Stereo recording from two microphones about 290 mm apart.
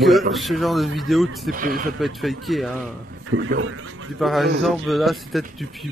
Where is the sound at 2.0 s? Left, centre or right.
Centre.